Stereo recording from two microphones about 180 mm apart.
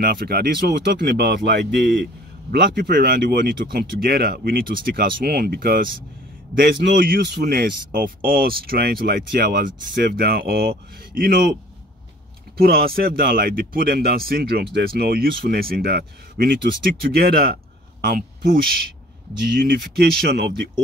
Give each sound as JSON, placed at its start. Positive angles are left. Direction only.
{"t": 0.0, "sound": "speech", "side_deg": -55}
{"t": 9.9, "sound": "speech", "side_deg": -60}
{"t": 12.5, "sound": "speech", "side_deg": -60}
{"t": 20.0, "sound": "speech", "side_deg": -65}